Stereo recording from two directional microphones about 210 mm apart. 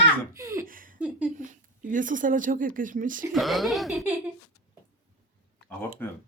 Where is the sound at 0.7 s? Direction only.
40° right (ahead or behind).